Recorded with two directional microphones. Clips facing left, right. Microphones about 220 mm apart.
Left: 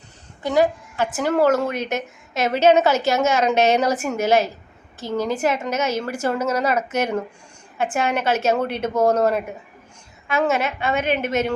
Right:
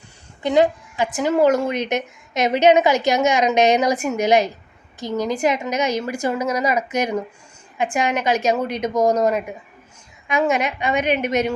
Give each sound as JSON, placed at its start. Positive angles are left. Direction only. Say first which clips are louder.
{"t": 0.4, "sound": "a woman's voice", "louder": "right 2 dB", "side_deg": -20}